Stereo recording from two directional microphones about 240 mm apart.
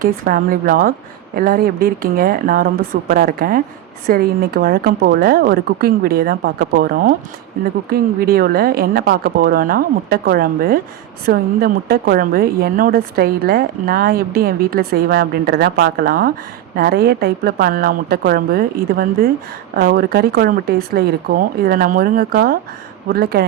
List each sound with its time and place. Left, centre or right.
0.3 s a woman's voice: right